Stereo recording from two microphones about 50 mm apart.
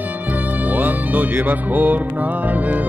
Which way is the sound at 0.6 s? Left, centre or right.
Right.